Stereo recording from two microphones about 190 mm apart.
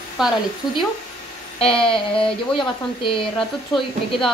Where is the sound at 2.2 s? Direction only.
25° left (ahead or behind).